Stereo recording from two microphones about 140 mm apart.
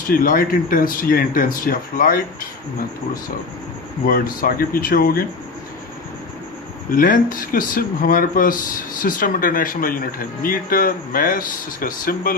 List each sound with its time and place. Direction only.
0.1 s speech: 80° left
4.0 s speech: 90° left
6.9 s speech: 85° left